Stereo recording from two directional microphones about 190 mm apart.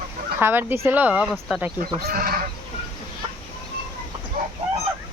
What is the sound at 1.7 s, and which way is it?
Speech, 50° right (ahead or behind).